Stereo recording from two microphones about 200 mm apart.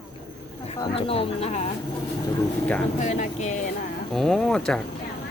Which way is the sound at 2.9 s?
35° left (ahead or behind).